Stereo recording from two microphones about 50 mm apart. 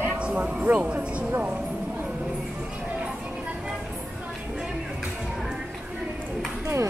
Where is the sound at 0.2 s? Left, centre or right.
Centre.